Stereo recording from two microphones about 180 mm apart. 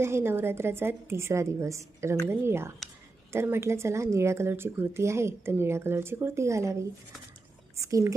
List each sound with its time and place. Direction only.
0.0 s speech: 15° right (ahead or behind)
7.8 s speech: 15° right (ahead or behind)